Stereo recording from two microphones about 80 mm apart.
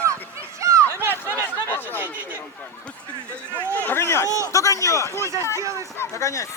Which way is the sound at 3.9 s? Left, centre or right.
Left.